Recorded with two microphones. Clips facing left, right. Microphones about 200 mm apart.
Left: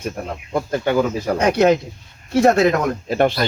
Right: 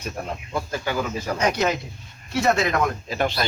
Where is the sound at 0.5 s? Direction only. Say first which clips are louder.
Left 8 dB; 55° left (ahead or behind).